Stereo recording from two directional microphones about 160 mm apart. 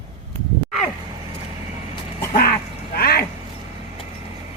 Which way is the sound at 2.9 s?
75° left (ahead or behind).